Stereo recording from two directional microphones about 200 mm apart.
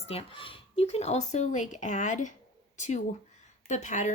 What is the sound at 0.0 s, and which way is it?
Speech, 30° left (ahead or behind).